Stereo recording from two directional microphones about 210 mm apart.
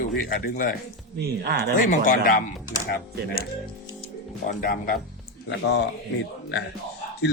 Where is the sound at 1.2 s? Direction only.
50° right (ahead or behind).